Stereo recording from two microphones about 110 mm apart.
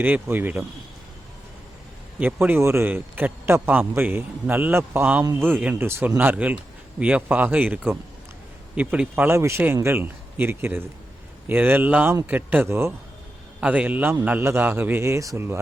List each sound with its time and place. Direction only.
0.0 s a man's voice: 15° right (ahead or behind)
2.1 s a man's voice: 15° right (ahead or behind)
13.6 s a man's voice: 10° right (ahead or behind)